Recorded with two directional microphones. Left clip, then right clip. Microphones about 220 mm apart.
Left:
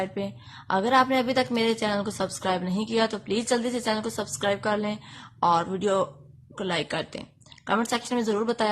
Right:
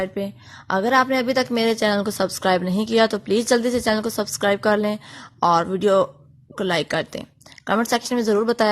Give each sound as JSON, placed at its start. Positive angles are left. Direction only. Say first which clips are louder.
{"t": 0.0, "sound": "a woman's voice", "louder": "right 5 dB", "side_deg": -20}